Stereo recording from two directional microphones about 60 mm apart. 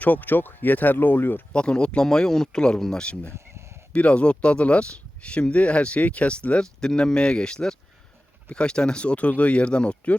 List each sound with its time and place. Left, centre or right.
0.0 s speech: left
1.5 s speech: centre